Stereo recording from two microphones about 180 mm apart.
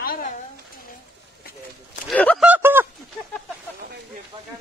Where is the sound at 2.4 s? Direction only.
10° right (ahead or behind).